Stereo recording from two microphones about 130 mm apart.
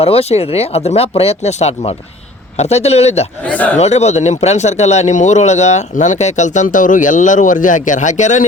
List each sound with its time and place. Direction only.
0.0 s speech: 50° left (ahead or behind)
3.4 s speech: 10° left (ahead or behind)
3.8 s speech: 55° left (ahead or behind)